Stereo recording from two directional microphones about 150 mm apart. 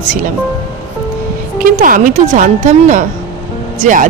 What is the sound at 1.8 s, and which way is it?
Speech, 60° right (ahead or behind).